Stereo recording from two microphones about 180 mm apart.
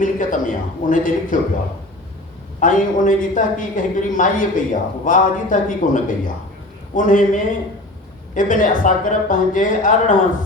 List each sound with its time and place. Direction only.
0.0 s a man's voice: 45° left (ahead or behind)
2.6 s a man's voice: 45° left (ahead or behind)